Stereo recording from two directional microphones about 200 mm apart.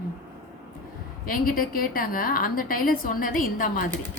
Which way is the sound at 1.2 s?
45° left (ahead or behind).